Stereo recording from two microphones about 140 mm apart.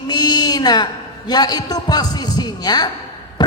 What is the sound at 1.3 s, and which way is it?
Speech, 30° left (ahead or behind).